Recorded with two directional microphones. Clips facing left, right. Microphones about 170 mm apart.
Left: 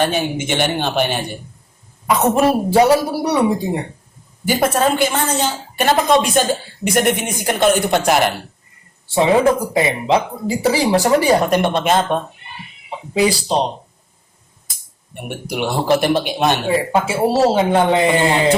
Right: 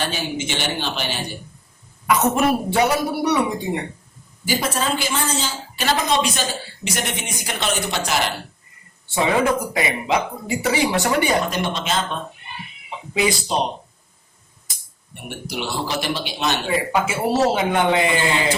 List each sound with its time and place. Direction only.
0.0 s a woman's voice: 55° left (ahead or behind)
2.0 s speech: 30° left (ahead or behind)
4.4 s a woman's voice: 60° left (ahead or behind)
9.0 s speech: 30° left (ahead or behind)
11.4 s a woman's voice: 55° left (ahead or behind)
13.1 s speech: 35° left (ahead or behind)
15.1 s speech: 55° left (ahead or behind)
16.9 s speech: 30° left (ahead or behind)